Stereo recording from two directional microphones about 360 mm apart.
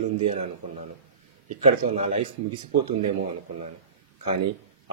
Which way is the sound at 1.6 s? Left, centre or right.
Centre.